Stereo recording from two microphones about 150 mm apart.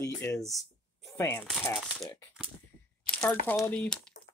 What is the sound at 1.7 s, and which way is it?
Speech, centre (ahead or behind).